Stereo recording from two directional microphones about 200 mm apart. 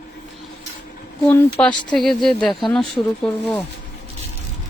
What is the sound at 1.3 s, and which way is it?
Speech, 10° left (ahead or behind).